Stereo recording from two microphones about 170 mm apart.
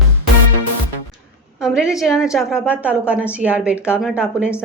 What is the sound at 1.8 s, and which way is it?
A woman's voice, 5° right (ahead or behind).